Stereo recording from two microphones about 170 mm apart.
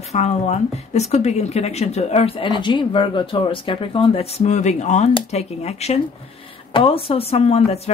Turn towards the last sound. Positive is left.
turn(degrees=35)  # may be behind; listen again after turning